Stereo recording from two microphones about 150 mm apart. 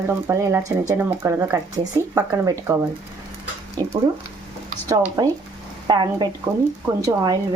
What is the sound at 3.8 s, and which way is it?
Speech, 25° right (ahead or behind).